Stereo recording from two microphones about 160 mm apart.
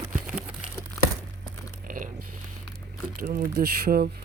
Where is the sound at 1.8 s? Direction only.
60° right (ahead or behind).